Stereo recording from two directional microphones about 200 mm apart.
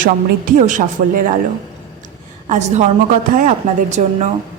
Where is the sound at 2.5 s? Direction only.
35° right (ahead or behind).